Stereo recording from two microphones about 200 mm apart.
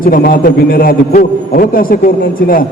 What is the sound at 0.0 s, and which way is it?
A man's voice, 45° left (ahead or behind).